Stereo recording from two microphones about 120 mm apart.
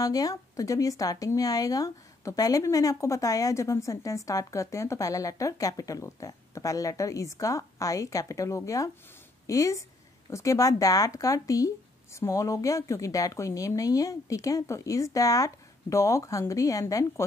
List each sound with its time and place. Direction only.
0.0 s speech: 30° left (ahead or behind)